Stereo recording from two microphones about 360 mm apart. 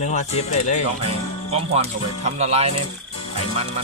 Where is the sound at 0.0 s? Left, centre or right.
Centre.